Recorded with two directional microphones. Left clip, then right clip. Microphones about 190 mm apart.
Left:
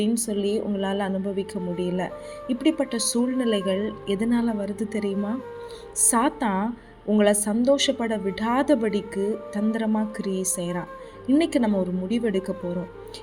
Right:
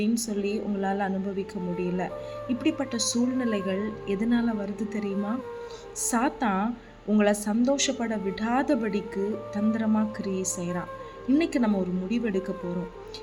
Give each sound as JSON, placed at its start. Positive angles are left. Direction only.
{"t": 0.0, "sound": "speech", "side_deg": 15}
{"t": 2.6, "sound": "a woman's voice", "side_deg": 15}